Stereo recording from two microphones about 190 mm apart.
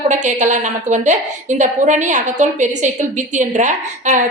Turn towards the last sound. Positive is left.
turn(degrees=-40)  # may be behind; listen again after turning